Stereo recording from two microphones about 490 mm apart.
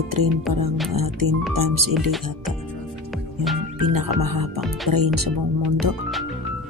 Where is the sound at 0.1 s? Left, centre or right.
Right.